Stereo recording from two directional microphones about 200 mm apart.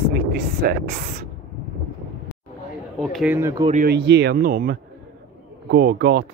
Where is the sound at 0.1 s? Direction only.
50° right (ahead or behind).